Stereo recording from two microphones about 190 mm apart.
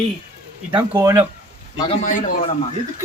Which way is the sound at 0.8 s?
15° right (ahead or behind).